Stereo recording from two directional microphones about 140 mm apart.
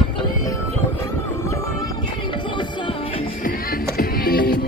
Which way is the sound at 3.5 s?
90° left.